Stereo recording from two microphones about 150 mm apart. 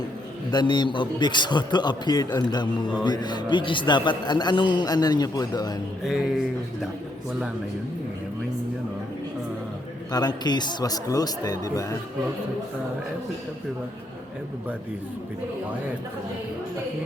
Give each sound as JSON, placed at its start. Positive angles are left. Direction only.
{"t": 0.5, "sound": "a man's voice", "side_deg": 30}
{"t": 6.1, "sound": "speech", "side_deg": -5}
{"t": 10.1, "sound": "a man's voice", "side_deg": 25}